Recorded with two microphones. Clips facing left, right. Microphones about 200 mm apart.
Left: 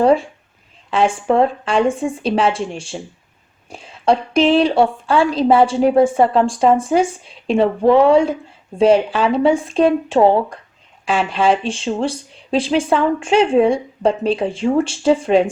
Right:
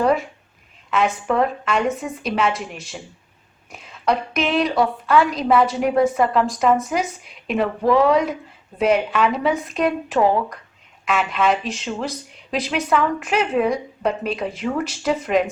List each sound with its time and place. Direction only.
0.0 s a woman's voice: 30° left (ahead or behind)